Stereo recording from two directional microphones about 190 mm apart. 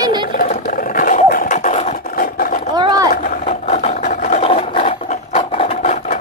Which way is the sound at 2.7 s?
20° right (ahead or behind).